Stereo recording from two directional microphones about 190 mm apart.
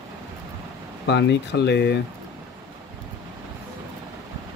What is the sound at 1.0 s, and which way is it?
Speech, 65° left (ahead or behind).